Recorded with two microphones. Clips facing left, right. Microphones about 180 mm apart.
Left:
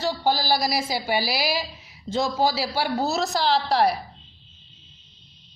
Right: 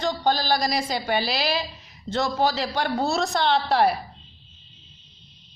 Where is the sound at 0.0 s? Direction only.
10° left (ahead or behind).